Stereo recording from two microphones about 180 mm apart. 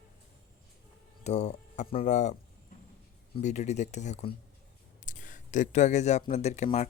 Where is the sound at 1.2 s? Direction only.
35° left (ahead or behind).